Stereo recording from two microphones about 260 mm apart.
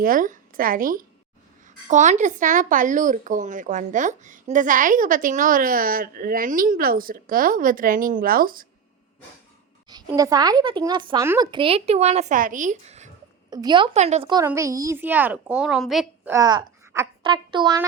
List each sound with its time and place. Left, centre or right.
0.0 s speech: right
9.9 s speech: centre
13.5 s a woman's voice: centre